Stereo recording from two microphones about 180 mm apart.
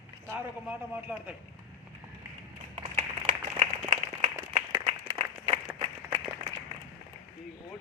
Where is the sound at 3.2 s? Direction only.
40° right (ahead or behind).